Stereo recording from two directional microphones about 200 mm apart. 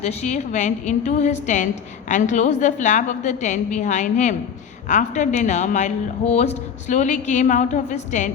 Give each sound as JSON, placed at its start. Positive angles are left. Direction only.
{"t": 0.0, "sound": "a woman's voice", "side_deg": 35}